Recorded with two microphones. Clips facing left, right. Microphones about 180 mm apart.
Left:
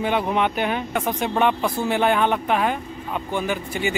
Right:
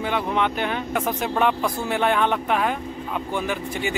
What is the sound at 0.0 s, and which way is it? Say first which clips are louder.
Speech: left 2 dB; 15° left (ahead or behind).